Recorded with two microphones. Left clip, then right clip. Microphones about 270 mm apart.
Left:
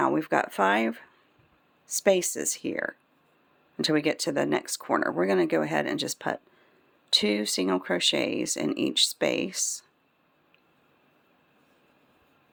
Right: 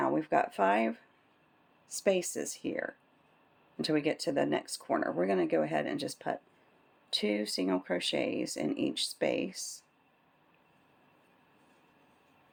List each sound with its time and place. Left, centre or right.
0.0 s speech: left